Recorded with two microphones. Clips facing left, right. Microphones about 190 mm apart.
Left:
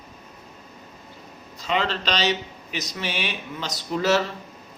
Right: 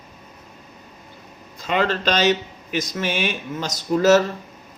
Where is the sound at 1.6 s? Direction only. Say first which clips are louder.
Right 4 dB; 50° right (ahead or behind).